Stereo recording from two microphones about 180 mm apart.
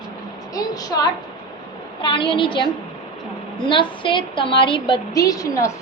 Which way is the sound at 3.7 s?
25° left (ahead or behind).